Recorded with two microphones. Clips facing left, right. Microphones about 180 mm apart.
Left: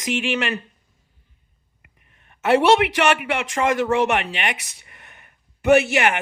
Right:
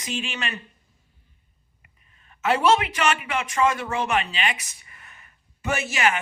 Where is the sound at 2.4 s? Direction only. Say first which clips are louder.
Left 5 dB; 65° left (ahead or behind).